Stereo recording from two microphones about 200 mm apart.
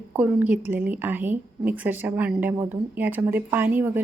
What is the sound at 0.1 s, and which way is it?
A woman's voice, 10° right (ahead or behind).